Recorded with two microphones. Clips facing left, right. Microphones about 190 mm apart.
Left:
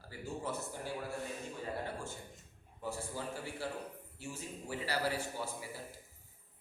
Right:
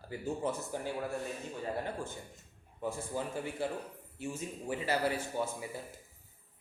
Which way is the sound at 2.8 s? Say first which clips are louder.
Right 4 dB; 20° right (ahead or behind).